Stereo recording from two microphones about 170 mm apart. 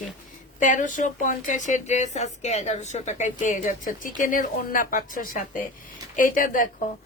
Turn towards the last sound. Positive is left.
turn(degrees=50)  # may be behind; listen again after turning